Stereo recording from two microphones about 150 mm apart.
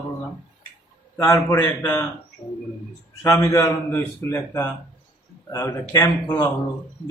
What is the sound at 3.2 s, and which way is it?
A man's voice, 20° left (ahead or behind).